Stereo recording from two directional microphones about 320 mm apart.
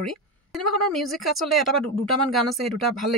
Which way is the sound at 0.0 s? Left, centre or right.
Centre.